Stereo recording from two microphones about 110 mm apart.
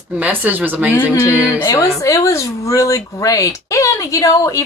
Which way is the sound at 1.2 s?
25° left (ahead or behind).